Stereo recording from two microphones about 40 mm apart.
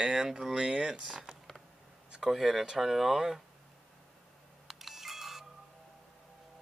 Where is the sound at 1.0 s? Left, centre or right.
Centre.